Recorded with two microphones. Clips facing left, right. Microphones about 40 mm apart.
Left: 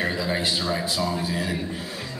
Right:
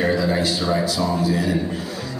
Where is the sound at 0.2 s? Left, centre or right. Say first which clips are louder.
Right 4 dB; left.